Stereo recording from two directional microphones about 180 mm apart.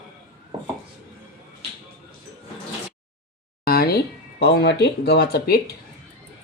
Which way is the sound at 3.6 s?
55° left (ahead or behind).